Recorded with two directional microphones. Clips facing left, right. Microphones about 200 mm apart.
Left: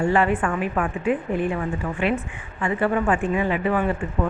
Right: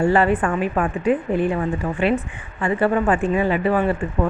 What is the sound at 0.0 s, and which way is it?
Speech, 35° right (ahead or behind).